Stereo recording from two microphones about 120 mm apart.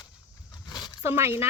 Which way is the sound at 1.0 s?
20° right (ahead or behind).